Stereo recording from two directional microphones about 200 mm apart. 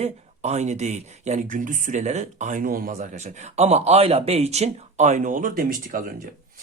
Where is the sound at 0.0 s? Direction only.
35° right (ahead or behind).